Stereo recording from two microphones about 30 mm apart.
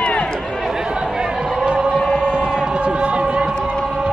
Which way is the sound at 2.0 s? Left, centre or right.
Left.